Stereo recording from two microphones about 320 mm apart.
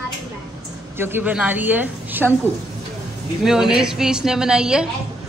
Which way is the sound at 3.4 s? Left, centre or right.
Centre.